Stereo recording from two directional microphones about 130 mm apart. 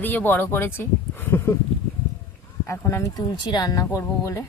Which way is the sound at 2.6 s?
20° left (ahead or behind).